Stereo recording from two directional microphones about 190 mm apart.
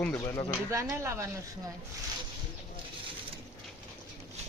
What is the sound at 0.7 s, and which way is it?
Speech, 15° right (ahead or behind).